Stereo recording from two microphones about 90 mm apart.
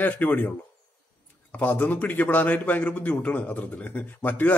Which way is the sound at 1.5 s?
20° left (ahead or behind).